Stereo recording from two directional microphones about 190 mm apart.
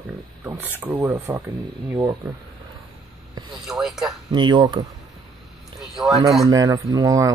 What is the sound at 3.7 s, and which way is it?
Speech, centre (ahead or behind).